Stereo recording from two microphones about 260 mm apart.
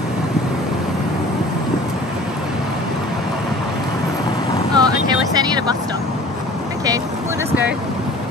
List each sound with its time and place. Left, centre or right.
4.7 s vehicle: centre